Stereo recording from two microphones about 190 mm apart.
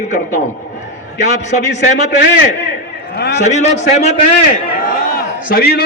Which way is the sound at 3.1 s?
60° left (ahead or behind).